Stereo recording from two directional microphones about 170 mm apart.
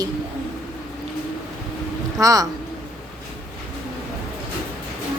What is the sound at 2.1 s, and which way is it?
Speech, 20° right (ahead or behind).